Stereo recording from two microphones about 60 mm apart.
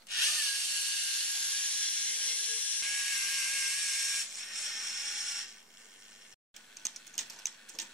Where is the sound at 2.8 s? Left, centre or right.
Centre.